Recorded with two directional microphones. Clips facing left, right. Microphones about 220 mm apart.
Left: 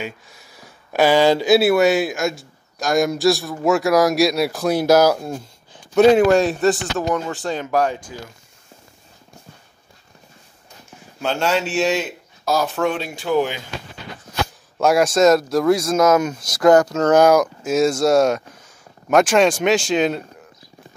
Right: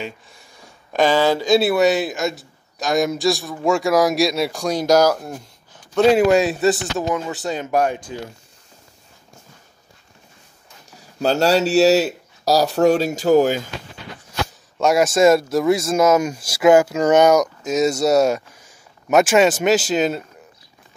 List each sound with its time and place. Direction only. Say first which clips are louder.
0.0 s speech: left 1 dB; 5° left (ahead or behind)
6.1 s speech: left 1 dB; 5° right (ahead or behind)
7.6 s speech: right 1 dB; 15° right (ahead or behind)
10.9 s speech: right 5 dB; 35° right (ahead or behind)
14.8 s speech: even; centre (ahead or behind)